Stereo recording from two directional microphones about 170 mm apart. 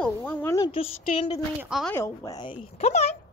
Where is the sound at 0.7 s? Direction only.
30° left (ahead or behind).